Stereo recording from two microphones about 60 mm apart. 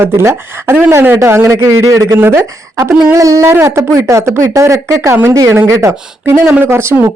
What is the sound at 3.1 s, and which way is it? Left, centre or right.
Speech, right.